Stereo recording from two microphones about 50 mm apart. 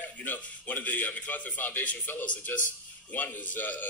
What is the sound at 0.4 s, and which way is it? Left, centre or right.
Speech, left.